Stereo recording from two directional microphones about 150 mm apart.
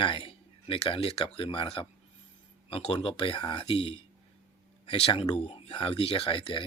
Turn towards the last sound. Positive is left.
turn(degrees=35)  # may be behind; listen again after turning